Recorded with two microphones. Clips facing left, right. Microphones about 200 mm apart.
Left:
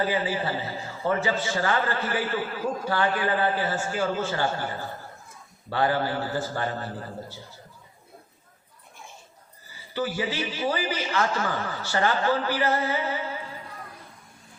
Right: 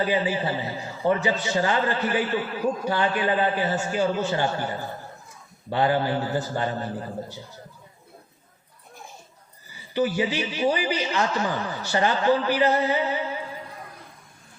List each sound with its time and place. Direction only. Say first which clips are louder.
0.0 s a man's voice: right 2 dB; 20° right (ahead or behind)
9.6 s a man's voice: right 5 dB; 15° right (ahead or behind)